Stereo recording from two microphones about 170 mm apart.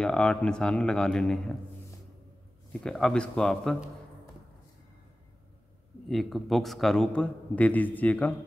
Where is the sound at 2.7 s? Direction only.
5° left (ahead or behind).